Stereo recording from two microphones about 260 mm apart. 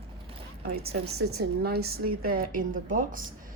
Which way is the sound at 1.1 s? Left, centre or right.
Right.